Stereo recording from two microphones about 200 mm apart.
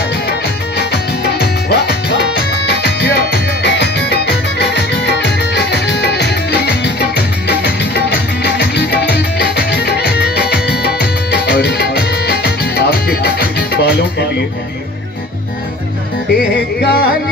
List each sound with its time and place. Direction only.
0.7 s music: 55° left (ahead or behind)
16.3 s music: 55° left (ahead or behind)